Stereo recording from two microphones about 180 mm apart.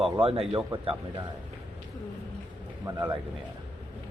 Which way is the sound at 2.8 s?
10° right (ahead or behind).